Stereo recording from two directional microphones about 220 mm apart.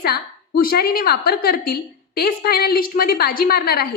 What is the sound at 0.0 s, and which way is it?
A woman's voice, 45° left (ahead or behind).